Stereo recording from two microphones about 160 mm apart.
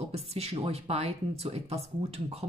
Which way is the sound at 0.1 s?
40° right (ahead or behind).